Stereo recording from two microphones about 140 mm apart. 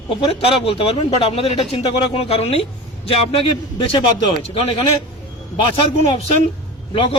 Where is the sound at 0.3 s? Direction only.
40° left (ahead or behind).